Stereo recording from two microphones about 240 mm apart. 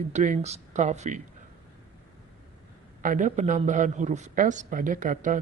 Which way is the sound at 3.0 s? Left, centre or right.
Right.